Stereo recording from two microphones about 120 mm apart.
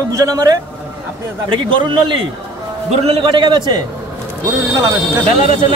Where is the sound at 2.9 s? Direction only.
55° right (ahead or behind); by 3.8 s 40° right (ahead or behind).